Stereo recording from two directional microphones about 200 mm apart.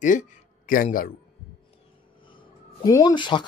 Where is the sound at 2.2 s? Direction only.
20° left (ahead or behind).